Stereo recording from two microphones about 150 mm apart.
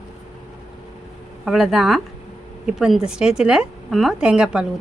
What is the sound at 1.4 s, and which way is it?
A woman's voice, centre (ahead or behind).